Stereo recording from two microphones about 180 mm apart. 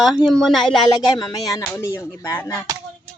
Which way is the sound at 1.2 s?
20° left (ahead or behind).